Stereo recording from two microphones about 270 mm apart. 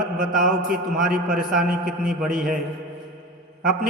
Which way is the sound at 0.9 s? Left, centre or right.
Centre.